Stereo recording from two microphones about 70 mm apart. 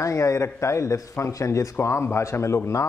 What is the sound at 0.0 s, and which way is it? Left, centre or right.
A man's voice, left.